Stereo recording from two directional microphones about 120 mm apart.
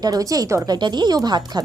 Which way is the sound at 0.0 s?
30° right (ahead or behind).